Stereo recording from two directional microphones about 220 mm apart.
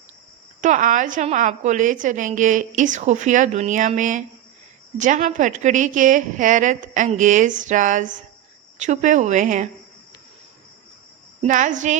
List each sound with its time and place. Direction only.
0.6 s a woman's voice: 35° right (ahead or behind)
11.4 s a woman's voice: 35° right (ahead or behind)